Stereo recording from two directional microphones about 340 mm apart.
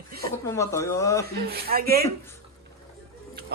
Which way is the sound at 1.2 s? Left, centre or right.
Right.